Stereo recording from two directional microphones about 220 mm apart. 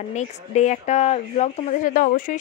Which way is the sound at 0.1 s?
30° left (ahead or behind).